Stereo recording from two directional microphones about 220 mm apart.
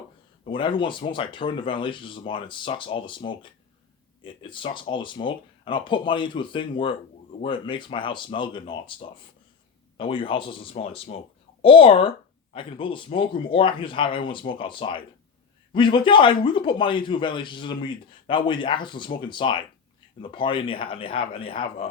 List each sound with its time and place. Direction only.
0.4 s a man's voice: 20° left (ahead or behind)